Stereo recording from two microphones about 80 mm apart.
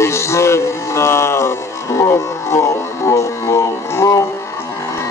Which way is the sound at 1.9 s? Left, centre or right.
Left.